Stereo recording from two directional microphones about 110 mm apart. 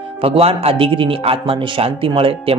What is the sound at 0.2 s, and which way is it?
A man's voice, 60° right (ahead or behind).